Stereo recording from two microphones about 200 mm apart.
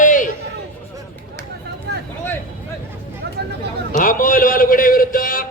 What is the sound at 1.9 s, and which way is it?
Vehicle, 60° right (ahead or behind).